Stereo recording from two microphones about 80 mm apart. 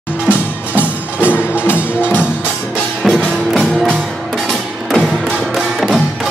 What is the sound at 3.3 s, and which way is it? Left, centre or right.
Music, centre.